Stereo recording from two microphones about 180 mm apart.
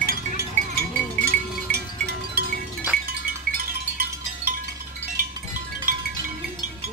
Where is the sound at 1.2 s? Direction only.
60° right (ahead or behind).